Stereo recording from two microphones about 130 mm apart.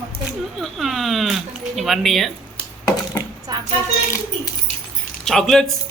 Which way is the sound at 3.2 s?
20° left (ahead or behind).